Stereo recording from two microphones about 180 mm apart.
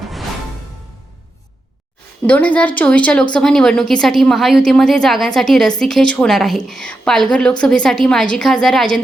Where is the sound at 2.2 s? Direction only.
10° left (ahead or behind).